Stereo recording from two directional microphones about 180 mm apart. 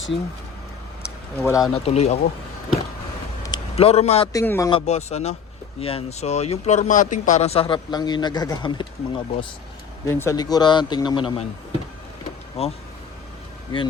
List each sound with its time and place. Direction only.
1.4 s speech: 15° left (ahead or behind)
1.7 s a man's voice: 35° left (ahead or behind)
3.8 s a man's voice: 35° left (ahead or behind)
4.3 s speech: 15° left (ahead or behind)
4.7 s a man's voice: 35° left (ahead or behind)
10.1 s speech: 15° left (ahead or behind)
12.6 s a man's voice: 35° left (ahead or behind)